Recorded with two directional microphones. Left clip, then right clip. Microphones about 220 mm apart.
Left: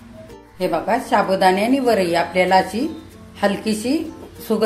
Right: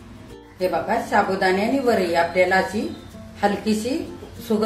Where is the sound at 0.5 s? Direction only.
40° left (ahead or behind).